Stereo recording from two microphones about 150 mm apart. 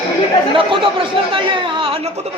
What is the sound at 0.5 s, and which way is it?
Speech, 35° right (ahead or behind).